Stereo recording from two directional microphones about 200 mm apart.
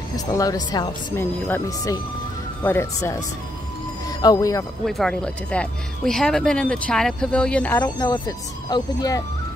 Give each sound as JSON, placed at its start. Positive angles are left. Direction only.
{"t": 0.1, "sound": "speech", "side_deg": 20}
{"t": 4.2, "sound": "speech", "side_deg": 20}
{"t": 4.8, "sound": "speech", "side_deg": 0}
{"t": 7.8, "sound": "speech", "side_deg": 20}